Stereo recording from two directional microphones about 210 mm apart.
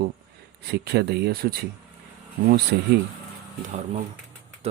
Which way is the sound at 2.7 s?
50° right (ahead or behind).